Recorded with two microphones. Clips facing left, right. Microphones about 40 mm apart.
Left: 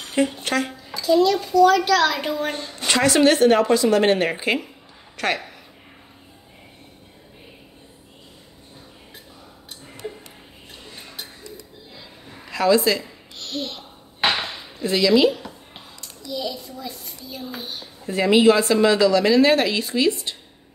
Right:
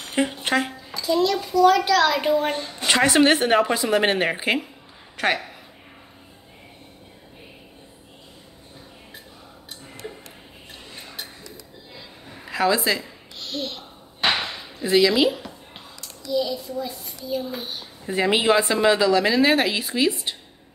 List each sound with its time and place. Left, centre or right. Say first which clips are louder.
0.1 s speech: left 1 dB; centre
0.7 s a child's voice: left 4 dB; centre
10.0 s a sound: left 4 dB; centre
12.4 s a sound: left 3 dB; centre
16.3 s a child's voice: right 5 dB; centre
18.0 s a woman's voice: left 4 dB; centre